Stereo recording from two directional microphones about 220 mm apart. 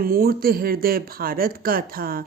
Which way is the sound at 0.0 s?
45° right (ahead or behind).